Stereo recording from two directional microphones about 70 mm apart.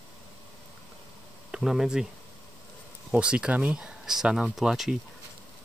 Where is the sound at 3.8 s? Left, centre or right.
Centre.